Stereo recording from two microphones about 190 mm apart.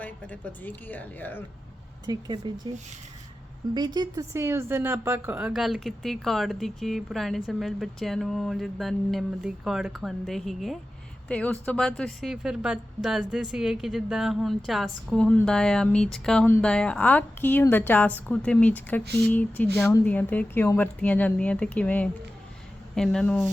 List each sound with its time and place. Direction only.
0.0 s a woman's voice: 10° left (ahead or behind)
2.0 s speech: 20° right (ahead or behind)
3.8 s a woman's voice: 20° right (ahead or behind); by 23.4 s 5° left (ahead or behind)